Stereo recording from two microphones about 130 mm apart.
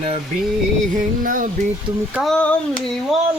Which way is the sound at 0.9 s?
90° right.